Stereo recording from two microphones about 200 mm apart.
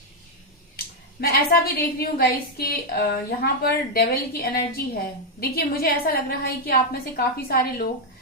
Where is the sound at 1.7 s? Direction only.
50° left (ahead or behind).